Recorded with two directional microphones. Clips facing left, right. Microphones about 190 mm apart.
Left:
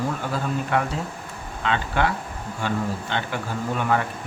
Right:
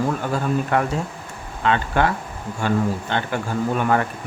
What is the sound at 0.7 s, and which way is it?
Speech, 45° right (ahead or behind).